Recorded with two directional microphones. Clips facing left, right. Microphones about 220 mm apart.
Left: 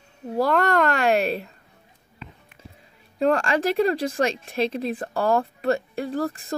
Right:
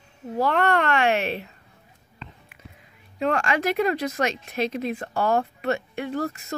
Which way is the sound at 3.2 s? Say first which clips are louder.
Left 3 dB; 35° left (ahead or behind).